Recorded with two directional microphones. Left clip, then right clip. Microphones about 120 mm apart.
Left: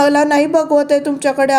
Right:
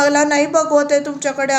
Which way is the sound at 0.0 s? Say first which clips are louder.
Left 2 dB; 60° left (ahead or behind).